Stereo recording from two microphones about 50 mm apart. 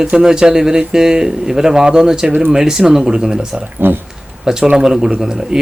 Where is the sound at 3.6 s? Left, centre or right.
Right.